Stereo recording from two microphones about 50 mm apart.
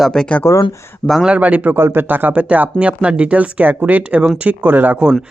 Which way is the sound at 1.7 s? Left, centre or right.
Right.